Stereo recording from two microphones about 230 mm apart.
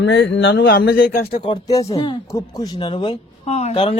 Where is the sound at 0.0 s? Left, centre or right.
Left.